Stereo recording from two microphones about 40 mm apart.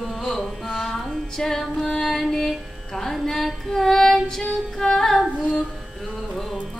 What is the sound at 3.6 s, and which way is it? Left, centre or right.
Female singing, centre.